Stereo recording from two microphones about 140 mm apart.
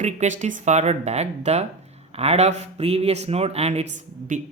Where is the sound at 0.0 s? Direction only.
55° right (ahead or behind).